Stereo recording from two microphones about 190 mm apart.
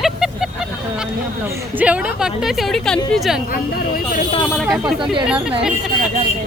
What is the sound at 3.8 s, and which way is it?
Speech, 50° left (ahead or behind).